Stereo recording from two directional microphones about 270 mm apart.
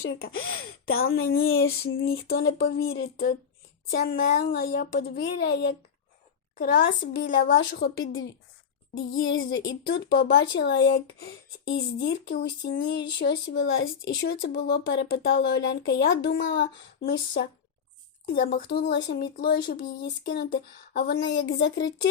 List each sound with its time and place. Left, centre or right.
0.0 s speech: left
2.0 s a woman's voice: left
7.9 s speech: left
18.3 s speech: left